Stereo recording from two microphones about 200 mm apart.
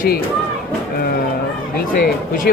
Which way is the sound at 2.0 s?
45° left (ahead or behind).